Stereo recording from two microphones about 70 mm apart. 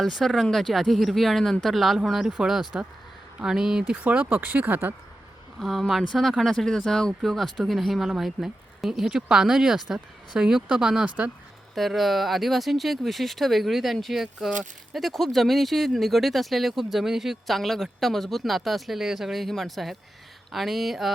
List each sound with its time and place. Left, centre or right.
0.0 s speech: centre; by 4.9 s right
5.5 s speech: centre
11.7 s speech: centre